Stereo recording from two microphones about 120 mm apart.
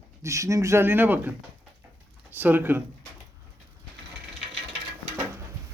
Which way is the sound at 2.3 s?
15° right (ahead or behind).